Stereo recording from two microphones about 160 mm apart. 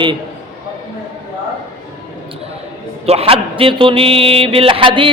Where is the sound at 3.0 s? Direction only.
40° right (ahead or behind).